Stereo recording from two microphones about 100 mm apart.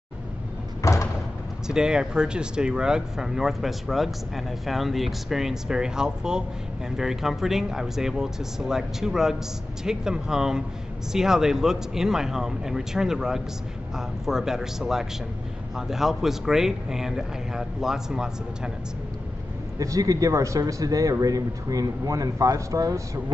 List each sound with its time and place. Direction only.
0.8 s door: 30° left (ahead or behind)
1.7 s a man's voice: 5° right (ahead or behind)
19.8 s speech: 35° right (ahead or behind)